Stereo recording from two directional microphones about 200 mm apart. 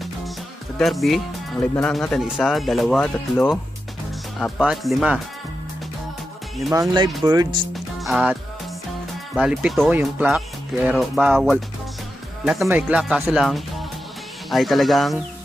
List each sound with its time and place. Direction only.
0.7 s speech: centre (ahead or behind)
7.2 s speech: 20° right (ahead or behind)
7.7 s music: centre (ahead or behind)
9.3 s speech: 5° right (ahead or behind)
12.6 s speech: 5° right (ahead or behind)